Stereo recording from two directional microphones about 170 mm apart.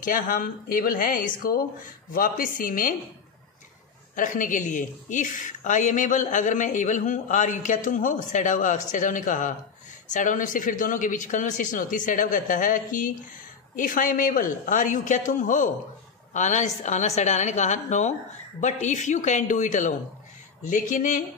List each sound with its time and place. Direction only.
0.0 s speech: 55° left (ahead or behind)
4.1 s speech: 50° left (ahead or behind)